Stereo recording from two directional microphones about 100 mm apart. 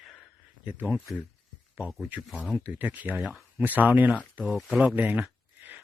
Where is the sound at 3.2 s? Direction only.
Centre (ahead or behind).